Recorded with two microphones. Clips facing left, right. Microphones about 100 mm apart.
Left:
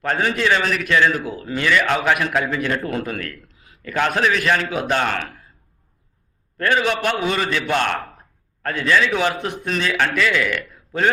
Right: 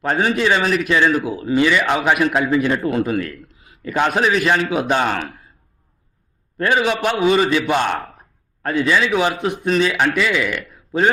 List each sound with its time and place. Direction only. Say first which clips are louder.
0.0 s a man's voice: right 3 dB; 15° right (ahead or behind)
1.2 s a man's voice: right 6 dB; 5° right (ahead or behind)
3.9 s a man's voice: right 2 dB; 15° right (ahead or behind)
6.6 s a man's voice: right 2 dB; 15° right (ahead or behind)